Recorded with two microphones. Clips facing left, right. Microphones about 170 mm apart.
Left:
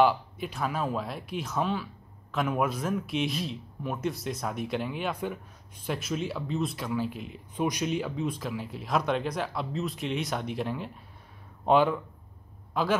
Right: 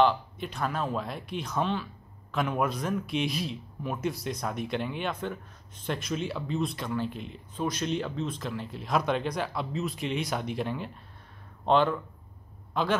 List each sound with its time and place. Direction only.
0.0 s speech: 5° left (ahead or behind)